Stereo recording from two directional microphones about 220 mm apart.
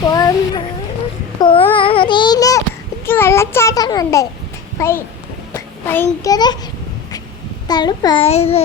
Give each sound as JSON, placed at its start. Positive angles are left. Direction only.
{"t": 0.1, "sound": "a sound", "side_deg": 15}
{"t": 1.4, "sound": "babbling", "side_deg": 25}
{"t": 1.7, "sound": "child singing", "side_deg": 25}
{"t": 3.1, "sound": "a child's voice", "side_deg": 10}
{"t": 7.7, "sound": "a child's voice", "side_deg": 20}